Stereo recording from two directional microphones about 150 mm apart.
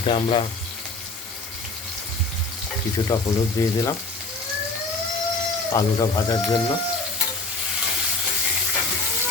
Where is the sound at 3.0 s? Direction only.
25° left (ahead or behind).